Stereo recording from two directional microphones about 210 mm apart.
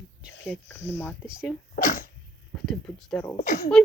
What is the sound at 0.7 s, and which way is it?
Speech, 10° left (ahead or behind).